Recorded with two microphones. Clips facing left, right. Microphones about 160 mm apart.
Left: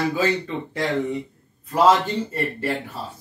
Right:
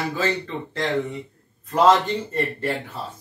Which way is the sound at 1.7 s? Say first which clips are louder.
Even; 5° left (ahead or behind).